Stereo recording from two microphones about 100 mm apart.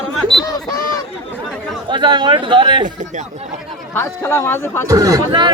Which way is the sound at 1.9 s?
50° right (ahead or behind).